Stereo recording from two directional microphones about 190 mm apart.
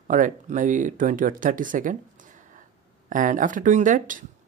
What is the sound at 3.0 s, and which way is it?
Speech, 45° right (ahead or behind).